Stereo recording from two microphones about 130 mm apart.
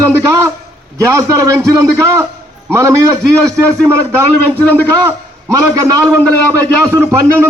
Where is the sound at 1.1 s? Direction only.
25° right (ahead or behind).